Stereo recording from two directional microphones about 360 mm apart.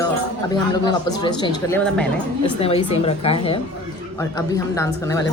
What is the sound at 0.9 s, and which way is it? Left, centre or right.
A woman's voice, centre.